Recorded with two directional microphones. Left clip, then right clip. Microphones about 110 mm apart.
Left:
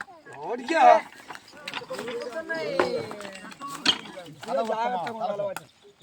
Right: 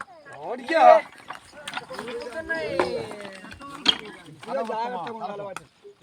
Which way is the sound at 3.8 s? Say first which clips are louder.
Right 2 dB; 35° right (ahead or behind).